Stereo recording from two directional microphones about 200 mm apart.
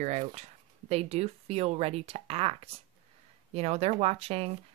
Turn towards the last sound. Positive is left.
turn(degrees=-30)  # may be behind; listen again after turning